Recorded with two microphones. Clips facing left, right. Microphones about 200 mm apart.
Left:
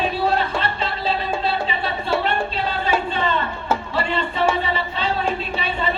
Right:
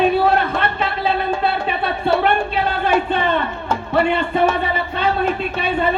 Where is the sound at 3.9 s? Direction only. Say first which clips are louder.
Right 10 dB; 55° right (ahead or behind).